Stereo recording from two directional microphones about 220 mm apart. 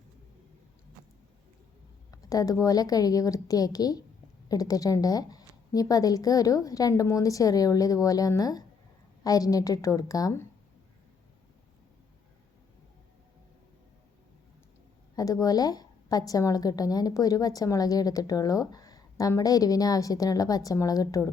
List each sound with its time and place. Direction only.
2.0 s a woman's voice: 15° left (ahead or behind)
15.1 s a woman's voice: 15° left (ahead or behind)